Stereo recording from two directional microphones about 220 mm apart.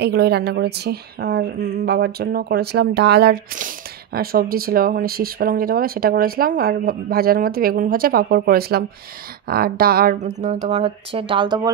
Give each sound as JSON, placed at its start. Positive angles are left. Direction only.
{"t": 0.0, "sound": "a woman's voice", "side_deg": -50}
{"t": 10.4, "sound": "speech", "side_deg": -30}